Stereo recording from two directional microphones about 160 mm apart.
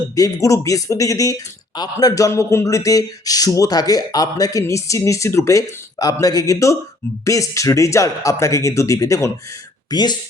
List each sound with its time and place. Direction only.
0.2 s speech: 20° left (ahead or behind)